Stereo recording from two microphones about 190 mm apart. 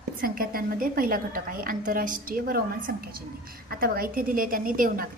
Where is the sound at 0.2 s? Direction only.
50° right (ahead or behind).